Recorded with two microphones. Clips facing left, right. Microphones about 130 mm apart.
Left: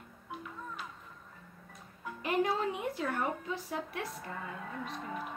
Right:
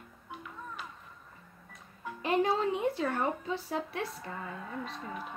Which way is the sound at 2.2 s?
30° right (ahead or behind).